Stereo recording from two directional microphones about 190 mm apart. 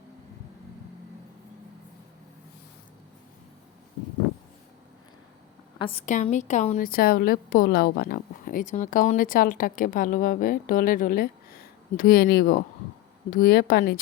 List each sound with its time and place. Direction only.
5.8 s a woman's voice: 35° left (ahead or behind); by 14.0 s 55° left (ahead or behind)